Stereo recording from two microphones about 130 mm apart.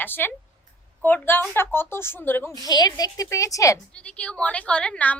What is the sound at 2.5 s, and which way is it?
A woman's voice, 30° left (ahead or behind).